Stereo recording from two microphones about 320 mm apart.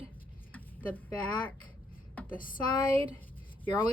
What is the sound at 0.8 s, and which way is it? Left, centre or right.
Speech, centre.